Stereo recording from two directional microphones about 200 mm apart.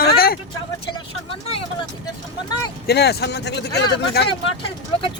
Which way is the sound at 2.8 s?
55° left (ahead or behind).